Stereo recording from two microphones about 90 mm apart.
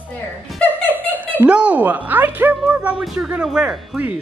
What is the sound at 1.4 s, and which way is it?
A woman's voice, 15° right (ahead or behind).